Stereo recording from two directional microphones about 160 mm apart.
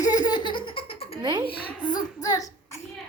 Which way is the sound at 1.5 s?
25° left (ahead or behind).